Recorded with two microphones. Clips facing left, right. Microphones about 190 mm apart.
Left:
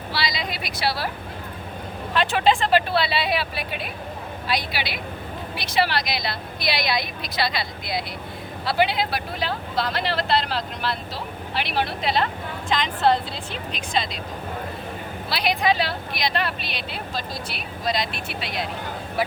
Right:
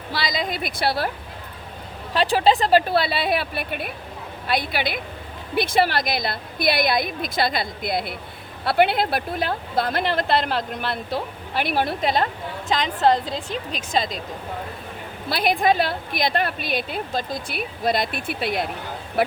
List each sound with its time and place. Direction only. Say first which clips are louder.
0.1 s speech: right 3 dB; 45° right (ahead or behind)
2.1 s speech: right 2 dB; 35° right (ahead or behind)
15.3 s speech: right 3 dB; 50° right (ahead or behind)